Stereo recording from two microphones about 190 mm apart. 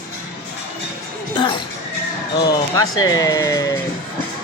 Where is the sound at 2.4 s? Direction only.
20° left (ahead or behind).